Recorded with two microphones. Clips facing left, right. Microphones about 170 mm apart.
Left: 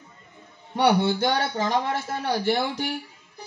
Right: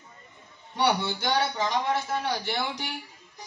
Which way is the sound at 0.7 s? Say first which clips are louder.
Left 6 dB; 55° left (ahead or behind).